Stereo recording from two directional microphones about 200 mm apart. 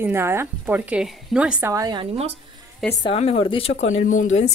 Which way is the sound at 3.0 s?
30° left (ahead or behind).